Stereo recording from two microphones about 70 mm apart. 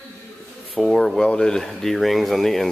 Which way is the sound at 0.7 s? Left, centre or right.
Centre.